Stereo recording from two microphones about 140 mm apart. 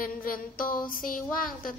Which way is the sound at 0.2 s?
85° left.